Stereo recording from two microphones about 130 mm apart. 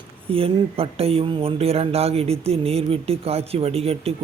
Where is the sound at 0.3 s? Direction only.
45° right (ahead or behind).